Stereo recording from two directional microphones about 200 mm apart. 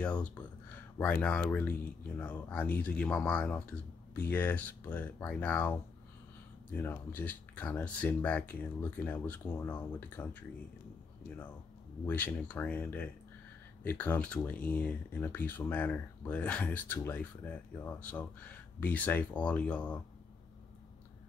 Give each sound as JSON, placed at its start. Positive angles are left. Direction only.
{"t": 0.0, "sound": "speech", "side_deg": 5}
{"t": 12.1, "sound": "speech", "side_deg": 10}